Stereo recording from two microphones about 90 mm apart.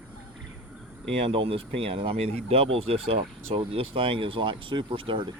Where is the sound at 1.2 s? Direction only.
90° right; by 5.3 s 70° right (ahead or behind).